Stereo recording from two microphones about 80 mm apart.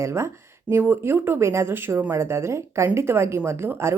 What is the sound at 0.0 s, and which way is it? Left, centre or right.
Speech, right.